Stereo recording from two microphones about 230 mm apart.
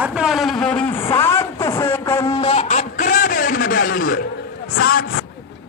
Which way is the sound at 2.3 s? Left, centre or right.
Left.